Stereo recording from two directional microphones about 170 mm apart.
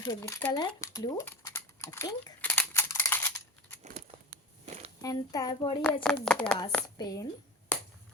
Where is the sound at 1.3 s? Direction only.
15° left (ahead or behind).